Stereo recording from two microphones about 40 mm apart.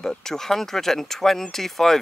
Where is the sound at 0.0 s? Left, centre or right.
Centre.